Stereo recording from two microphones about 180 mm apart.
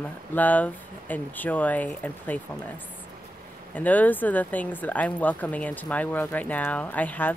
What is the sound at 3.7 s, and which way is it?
Speech, 10° left (ahead or behind).